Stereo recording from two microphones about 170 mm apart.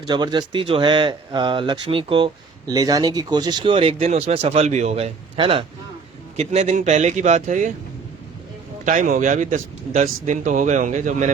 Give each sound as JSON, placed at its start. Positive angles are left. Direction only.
{"t": 0.1, "sound": "speech", "side_deg": -25}
{"t": 8.8, "sound": "speech", "side_deg": -50}